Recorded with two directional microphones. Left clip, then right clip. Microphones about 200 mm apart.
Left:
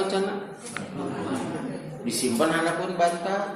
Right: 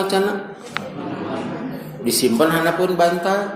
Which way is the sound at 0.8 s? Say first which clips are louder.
Right 9 dB; 55° right (ahead or behind).